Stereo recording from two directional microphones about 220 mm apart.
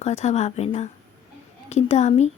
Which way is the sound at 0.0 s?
30° left (ahead or behind).